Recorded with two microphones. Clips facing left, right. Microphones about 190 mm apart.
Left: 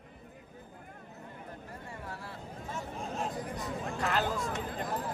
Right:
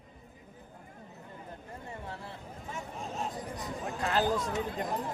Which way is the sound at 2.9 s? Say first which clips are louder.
Left 1 dB; centre (ahead or behind).